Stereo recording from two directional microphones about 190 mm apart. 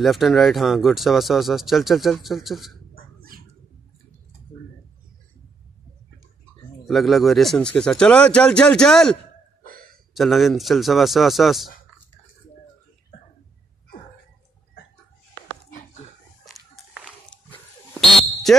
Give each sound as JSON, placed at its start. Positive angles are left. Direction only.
{"t": 0.0, "sound": "speech", "side_deg": 0}
{"t": 3.2, "sound": "cat", "side_deg": -50}
{"t": 6.9, "sound": "speech", "side_deg": 0}
{"t": 9.7, "sound": "gasp", "side_deg": -50}
{"t": 10.1, "sound": "speech", "side_deg": 0}
{"t": 16.4, "sound": "a sound", "side_deg": 0}
{"t": 17.5, "sound": "dog", "side_deg": 5}